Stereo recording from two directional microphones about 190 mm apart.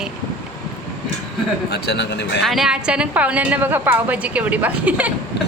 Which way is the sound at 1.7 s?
65° left (ahead or behind).